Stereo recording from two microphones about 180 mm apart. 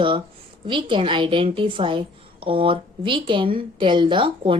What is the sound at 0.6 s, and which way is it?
A woman's voice, 30° right (ahead or behind).